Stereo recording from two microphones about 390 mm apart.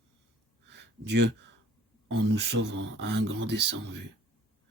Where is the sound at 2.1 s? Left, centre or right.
Right.